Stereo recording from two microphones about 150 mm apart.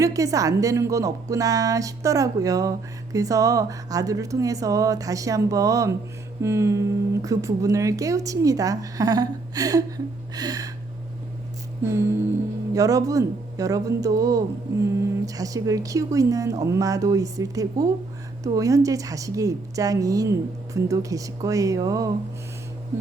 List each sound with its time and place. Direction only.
0.0 s a woman's voice: 20° right (ahead or behind)
11.8 s a woman's voice: 20° right (ahead or behind)